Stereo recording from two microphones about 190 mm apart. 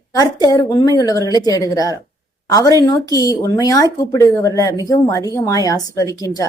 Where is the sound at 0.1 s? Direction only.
20° left (ahead or behind).